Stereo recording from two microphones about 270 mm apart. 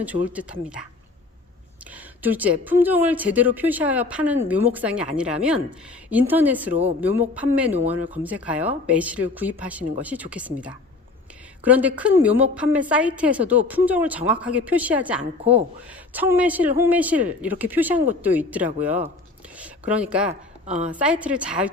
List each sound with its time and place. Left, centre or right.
0.0 s speech: centre
1.9 s speech: centre
15.2 s a woman's voice: right
16.1 s speech: centre